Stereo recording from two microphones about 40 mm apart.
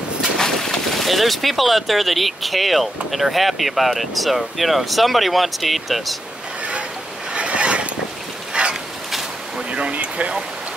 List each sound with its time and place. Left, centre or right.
0.4 s speech: centre
7.3 s mechanisms: right
8.5 s a sound: right
9.6 s speech: right